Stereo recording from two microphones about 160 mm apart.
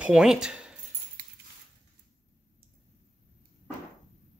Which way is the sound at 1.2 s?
65° right (ahead or behind).